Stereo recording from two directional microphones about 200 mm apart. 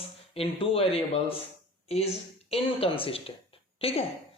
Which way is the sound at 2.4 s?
30° left (ahead or behind).